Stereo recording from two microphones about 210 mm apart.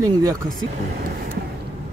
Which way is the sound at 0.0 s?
15° right (ahead or behind).